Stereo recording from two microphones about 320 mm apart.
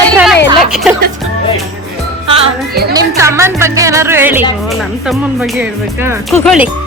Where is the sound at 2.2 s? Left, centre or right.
Centre.